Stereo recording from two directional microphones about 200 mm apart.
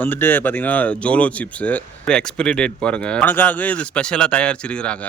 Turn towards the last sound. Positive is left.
turn(degrees=5)  # may be behind; listen again after turning